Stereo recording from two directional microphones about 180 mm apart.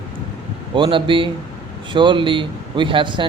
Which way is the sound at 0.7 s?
25° right (ahead or behind).